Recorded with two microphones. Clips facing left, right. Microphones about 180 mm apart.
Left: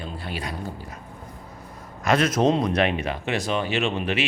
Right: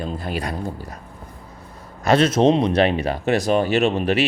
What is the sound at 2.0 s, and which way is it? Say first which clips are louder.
Speech: right 4 dB; 30° right (ahead or behind).